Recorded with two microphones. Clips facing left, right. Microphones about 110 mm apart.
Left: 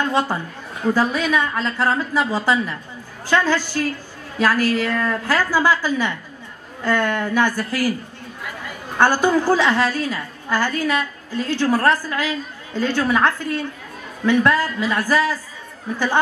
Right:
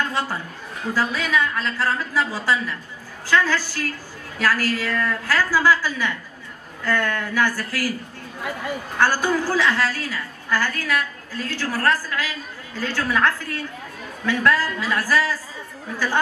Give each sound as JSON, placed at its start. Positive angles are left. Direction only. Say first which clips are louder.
{"t": 0.9, "sound": "a woman's voice", "louder": "left 1 dB", "side_deg": 20}
{"t": 8.9, "sound": "a woman's voice", "louder": "left 4 dB", "side_deg": 20}